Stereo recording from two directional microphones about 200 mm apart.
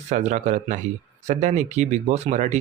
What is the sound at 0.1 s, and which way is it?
Speech, 35° right (ahead or behind).